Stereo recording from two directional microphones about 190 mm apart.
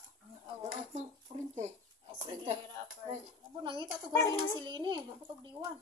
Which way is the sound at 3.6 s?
25° right (ahead or behind).